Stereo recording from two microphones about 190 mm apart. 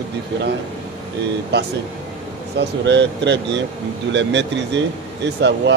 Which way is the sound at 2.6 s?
65° right (ahead or behind).